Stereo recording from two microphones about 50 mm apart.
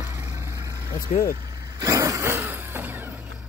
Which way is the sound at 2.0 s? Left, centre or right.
Right.